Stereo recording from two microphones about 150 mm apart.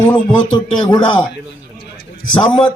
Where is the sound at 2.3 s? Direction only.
30° left (ahead or behind).